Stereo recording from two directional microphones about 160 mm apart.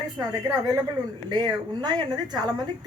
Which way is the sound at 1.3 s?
25° right (ahead or behind).